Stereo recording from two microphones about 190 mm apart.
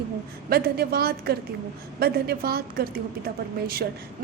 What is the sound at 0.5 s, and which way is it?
A woman's voice, 55° right (ahead or behind).